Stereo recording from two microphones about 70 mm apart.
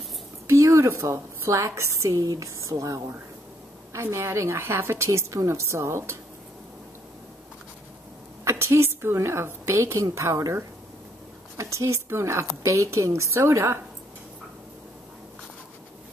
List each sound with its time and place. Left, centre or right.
0.5 s a woman's voice: right
8.5 s a woman's voice: right